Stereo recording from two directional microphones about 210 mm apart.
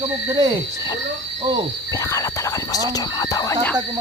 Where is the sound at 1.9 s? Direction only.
15° left (ahead or behind).